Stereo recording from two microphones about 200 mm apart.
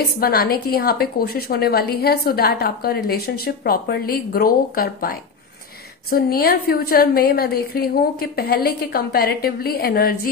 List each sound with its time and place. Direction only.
0.2 s a woman's voice: 50° left (ahead or behind)